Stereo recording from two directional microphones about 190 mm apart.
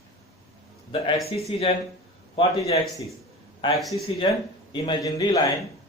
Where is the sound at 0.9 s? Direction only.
30° left (ahead or behind).